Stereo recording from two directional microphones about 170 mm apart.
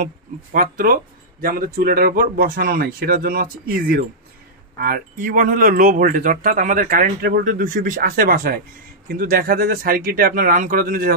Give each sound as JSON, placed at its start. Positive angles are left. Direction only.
{"t": 0.0, "sound": "speech", "side_deg": -55}